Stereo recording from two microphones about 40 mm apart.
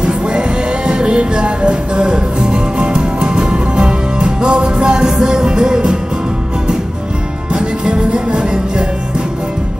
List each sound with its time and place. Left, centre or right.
0.0 s music: right
7.5 s music: right